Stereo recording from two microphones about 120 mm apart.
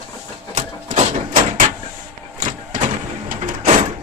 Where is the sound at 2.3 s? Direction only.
90° right.